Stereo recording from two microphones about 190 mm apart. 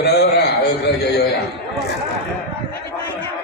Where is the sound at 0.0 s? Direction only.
55° left (ahead or behind).